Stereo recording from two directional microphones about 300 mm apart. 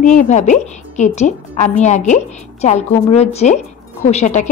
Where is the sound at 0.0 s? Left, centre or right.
Left.